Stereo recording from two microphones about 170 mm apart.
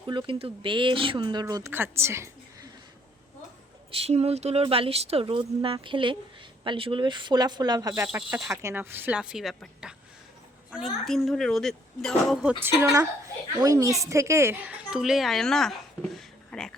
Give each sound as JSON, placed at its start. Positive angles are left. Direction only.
{"t": 0.1, "sound": "speech", "side_deg": -30}
{"t": 3.9, "sound": "speech", "side_deg": -35}
{"t": 8.0, "sound": "a woman's voice", "side_deg": -10}
{"t": 12.6, "sound": "a woman's voice", "side_deg": -20}